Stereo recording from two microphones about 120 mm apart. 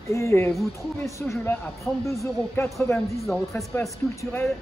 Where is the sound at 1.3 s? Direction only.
15° left (ahead or behind).